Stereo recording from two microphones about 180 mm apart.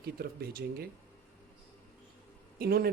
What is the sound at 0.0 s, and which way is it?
Speech, 55° right (ahead or behind).